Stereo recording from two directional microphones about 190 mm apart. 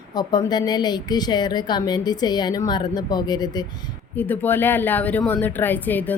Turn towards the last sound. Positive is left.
turn(degrees=10)  # may be behind; listen again after turning